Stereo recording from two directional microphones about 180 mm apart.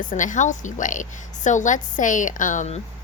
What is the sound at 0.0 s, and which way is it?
Speech, 45° left (ahead or behind).